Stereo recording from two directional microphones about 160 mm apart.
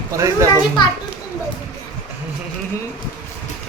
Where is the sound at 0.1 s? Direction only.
20° right (ahead or behind).